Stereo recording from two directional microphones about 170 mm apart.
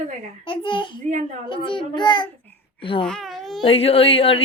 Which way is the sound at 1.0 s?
50° right (ahead or behind).